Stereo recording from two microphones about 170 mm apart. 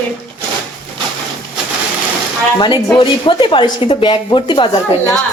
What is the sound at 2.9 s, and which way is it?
A woman's voice, 30° left (ahead or behind).